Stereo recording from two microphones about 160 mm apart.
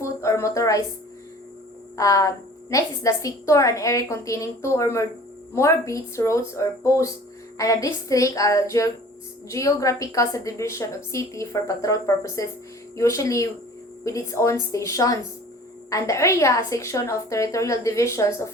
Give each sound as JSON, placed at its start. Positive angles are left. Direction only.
{"t": 0.0, "sound": "a woman's voice", "side_deg": 15}
{"t": 2.0, "sound": "a woman's voice", "side_deg": 20}